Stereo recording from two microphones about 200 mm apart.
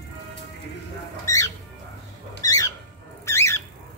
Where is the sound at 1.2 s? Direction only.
15° left (ahead or behind).